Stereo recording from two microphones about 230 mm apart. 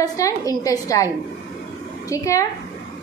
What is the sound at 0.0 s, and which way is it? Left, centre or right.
A woman's voice, centre.